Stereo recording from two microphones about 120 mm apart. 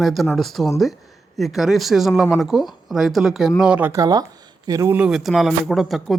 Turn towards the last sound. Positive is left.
turn(degrees=0)  # may be behind; listen again after turning